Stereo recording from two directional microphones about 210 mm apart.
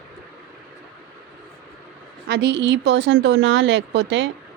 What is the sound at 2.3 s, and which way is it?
A woman's voice, 50° right (ahead or behind).